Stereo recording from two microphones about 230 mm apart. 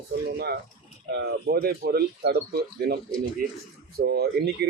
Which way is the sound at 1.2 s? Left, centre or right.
Right.